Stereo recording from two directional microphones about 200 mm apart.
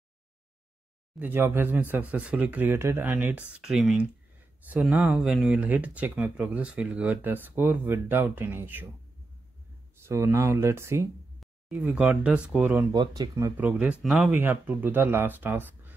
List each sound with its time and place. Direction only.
1.2 s speech: 10° right (ahead or behind)
10.0 s speech: 15° right (ahead or behind)
12.9 s speech: 20° right (ahead or behind)
13.6 s speech: 5° right (ahead or behind)